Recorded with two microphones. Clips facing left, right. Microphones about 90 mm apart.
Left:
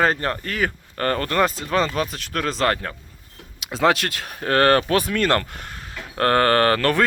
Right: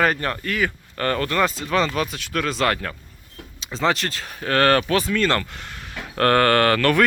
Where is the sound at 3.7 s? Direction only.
60° left (ahead or behind).